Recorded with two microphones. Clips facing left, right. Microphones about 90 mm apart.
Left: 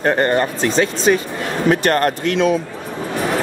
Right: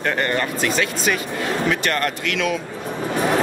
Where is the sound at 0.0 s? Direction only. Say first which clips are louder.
Left 6 dB; 35° left (ahead or behind).